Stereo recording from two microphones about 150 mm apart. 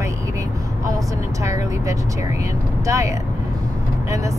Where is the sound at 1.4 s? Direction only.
20° right (ahead or behind).